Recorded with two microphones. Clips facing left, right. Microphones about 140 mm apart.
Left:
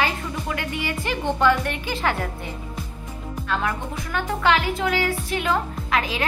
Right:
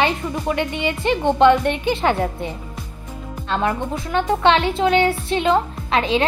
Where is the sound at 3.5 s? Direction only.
25° right (ahead or behind).